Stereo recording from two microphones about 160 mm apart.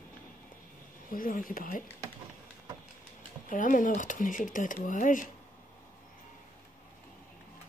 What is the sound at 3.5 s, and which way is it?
Speech, 55° left (ahead or behind).